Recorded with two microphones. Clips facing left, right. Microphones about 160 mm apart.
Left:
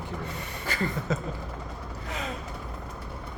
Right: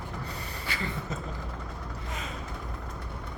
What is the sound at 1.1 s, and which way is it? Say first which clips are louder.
Speech: left 7 dB; 80° left.